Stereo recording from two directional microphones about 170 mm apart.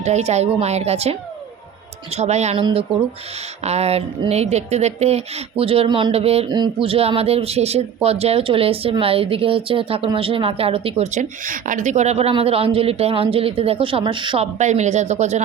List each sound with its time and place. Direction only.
0.0 s speech: 40° right (ahead or behind)
14.6 s speech: 45° right (ahead or behind)